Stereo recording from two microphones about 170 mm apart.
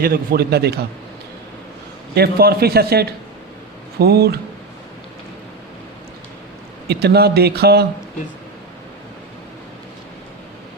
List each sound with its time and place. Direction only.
0.0 s a man's voice: 60° right (ahead or behind)
2.1 s a man's voice: 65° right (ahead or behind)
6.8 s a man's voice: 70° right (ahead or behind)